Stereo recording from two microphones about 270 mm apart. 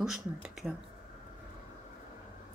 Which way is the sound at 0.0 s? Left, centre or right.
Centre.